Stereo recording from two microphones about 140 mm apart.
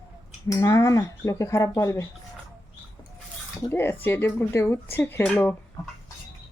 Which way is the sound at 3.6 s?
15° left (ahead or behind).